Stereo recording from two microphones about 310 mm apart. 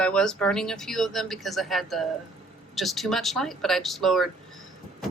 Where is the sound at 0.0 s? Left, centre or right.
Centre.